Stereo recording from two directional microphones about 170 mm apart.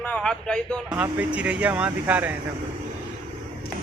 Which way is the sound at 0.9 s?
10° right (ahead or behind).